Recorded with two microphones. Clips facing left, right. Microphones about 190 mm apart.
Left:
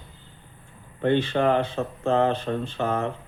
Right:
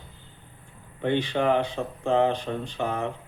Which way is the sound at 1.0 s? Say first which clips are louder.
Left 3 dB; 15° right (ahead or behind).